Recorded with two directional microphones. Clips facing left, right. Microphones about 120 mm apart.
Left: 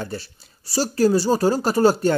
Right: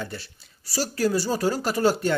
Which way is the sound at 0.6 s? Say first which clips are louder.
Left 6 dB; 30° left (ahead or behind).